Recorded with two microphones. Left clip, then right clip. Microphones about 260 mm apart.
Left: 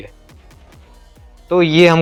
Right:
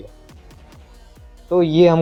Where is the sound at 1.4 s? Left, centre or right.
Left.